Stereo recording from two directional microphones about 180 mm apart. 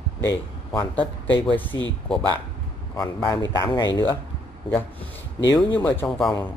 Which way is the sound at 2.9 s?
20° left (ahead or behind).